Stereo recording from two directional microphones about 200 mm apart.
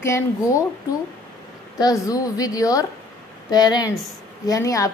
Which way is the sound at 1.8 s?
20° left (ahead or behind).